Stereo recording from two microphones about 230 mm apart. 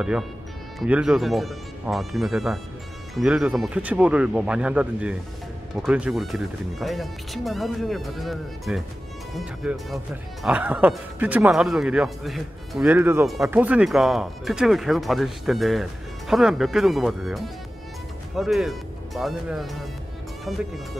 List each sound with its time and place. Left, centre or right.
0.7 s speech: centre